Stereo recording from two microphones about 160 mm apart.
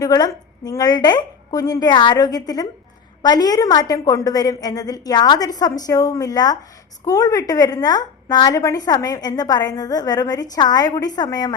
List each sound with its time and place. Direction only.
0.0 s a woman's voice: 25° left (ahead or behind)